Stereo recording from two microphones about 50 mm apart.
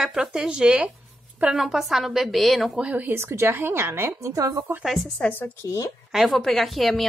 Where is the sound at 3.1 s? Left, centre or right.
Right.